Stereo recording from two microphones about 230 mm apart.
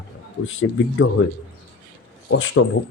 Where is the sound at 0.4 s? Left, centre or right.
Left.